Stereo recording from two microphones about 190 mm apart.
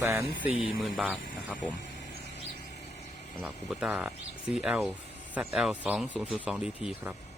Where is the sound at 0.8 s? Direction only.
Centre (ahead or behind).